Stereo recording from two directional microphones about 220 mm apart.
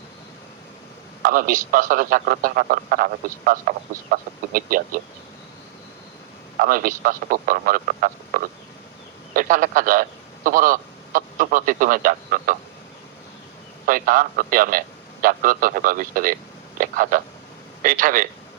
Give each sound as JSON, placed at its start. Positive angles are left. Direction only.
{"t": 1.2, "sound": "a man's voice", "side_deg": -40}
{"t": 6.6, "sound": "a man's voice", "side_deg": -40}
{"t": 13.8, "sound": "a man's voice", "side_deg": -40}